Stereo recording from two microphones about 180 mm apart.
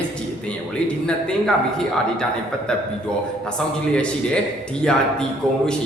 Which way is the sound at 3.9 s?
5° left (ahead or behind).